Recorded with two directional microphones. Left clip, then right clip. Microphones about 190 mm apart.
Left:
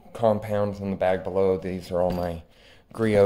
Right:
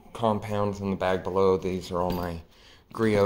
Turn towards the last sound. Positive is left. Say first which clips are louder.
# left 3 dB
turn(degrees=25)  # may be behind; listen again after turning